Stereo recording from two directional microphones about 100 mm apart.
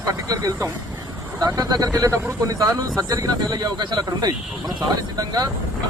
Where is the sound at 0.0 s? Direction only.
35° right (ahead or behind).